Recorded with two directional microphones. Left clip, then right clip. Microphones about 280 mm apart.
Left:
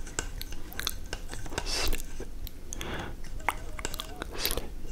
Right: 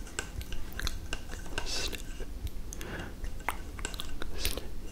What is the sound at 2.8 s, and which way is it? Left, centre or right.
Chewing, centre.